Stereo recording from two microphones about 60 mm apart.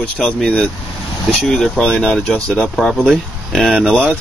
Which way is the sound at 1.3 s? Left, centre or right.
Centre.